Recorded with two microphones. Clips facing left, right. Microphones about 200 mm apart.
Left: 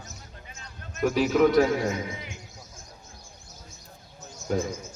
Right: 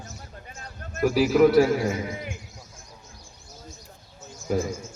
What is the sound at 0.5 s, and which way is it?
Basketball bounce, 50° right (ahead or behind).